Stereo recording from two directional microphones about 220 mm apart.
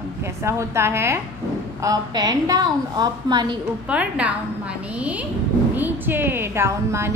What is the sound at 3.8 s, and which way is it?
Speech, 5° right (ahead or behind).